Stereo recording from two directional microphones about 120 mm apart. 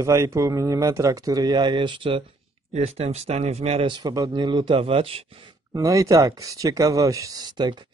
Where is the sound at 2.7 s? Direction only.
60° right (ahead or behind).